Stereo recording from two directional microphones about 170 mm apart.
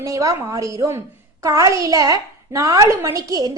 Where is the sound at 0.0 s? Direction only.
20° right (ahead or behind).